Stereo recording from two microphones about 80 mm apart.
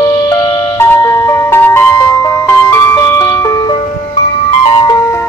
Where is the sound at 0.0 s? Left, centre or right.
Left.